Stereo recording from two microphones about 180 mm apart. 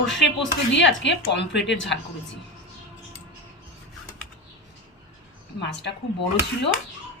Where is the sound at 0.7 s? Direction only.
80° left.